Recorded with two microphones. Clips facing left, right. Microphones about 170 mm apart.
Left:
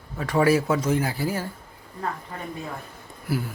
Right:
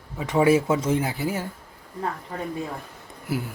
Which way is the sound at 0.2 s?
15° right (ahead or behind).